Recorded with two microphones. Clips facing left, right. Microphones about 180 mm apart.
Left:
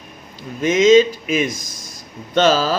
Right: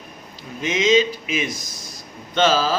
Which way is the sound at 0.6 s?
45° left (ahead or behind).